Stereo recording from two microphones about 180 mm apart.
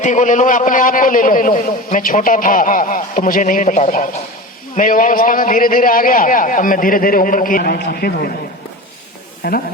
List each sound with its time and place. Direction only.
0.0 s a man's voice: 45° left (ahead or behind)
9.4 s speech: 60° left (ahead or behind)